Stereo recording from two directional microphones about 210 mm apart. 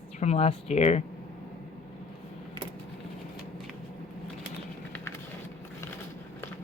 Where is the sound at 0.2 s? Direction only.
30° left (ahead or behind).